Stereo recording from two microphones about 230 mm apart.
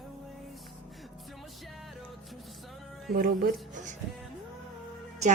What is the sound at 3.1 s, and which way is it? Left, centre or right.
Speech, right.